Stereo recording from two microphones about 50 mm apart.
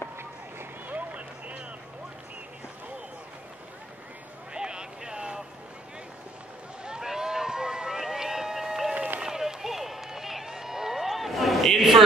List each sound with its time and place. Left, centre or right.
0.8 s a sound: right
4.6 s boat: centre
6.8 s run: centre